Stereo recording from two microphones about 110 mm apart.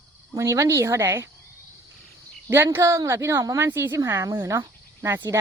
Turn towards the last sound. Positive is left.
turn(degrees=-25)  # may be behind; listen again after turning